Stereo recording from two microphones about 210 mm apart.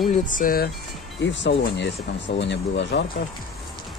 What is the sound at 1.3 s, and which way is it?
Speech, 55° left (ahead or behind).